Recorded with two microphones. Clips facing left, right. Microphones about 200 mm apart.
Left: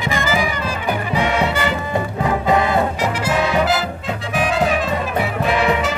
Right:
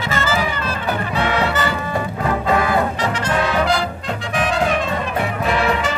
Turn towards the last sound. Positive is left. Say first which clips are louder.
# left 1 dB
turn(degrees=0)  # may be behind; listen again after turning